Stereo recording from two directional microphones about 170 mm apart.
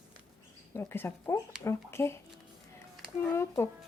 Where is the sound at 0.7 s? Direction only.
15° left (ahead or behind).